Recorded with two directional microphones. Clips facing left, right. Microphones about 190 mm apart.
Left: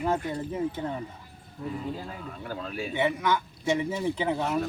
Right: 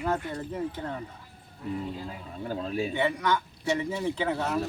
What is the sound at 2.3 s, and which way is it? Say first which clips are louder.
Speech: right 6 dB; 30° right (ahead or behind).